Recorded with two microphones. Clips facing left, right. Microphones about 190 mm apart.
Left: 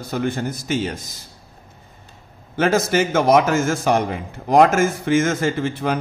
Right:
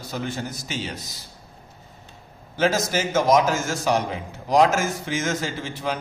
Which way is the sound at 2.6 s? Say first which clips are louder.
Left 4 dB; 60° left (ahead or behind).